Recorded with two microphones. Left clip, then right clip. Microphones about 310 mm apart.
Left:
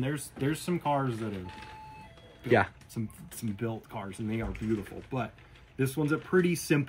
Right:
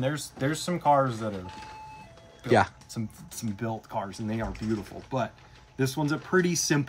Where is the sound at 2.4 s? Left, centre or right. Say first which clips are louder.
Right 3 dB; centre.